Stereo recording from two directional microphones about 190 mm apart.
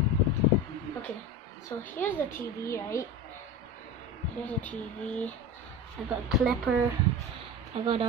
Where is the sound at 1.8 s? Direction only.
10° left (ahead or behind).